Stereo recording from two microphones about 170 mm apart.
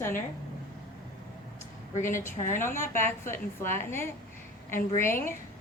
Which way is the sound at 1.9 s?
50° left (ahead or behind).